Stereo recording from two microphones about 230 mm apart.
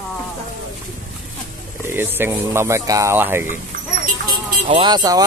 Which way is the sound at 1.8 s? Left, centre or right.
Centre.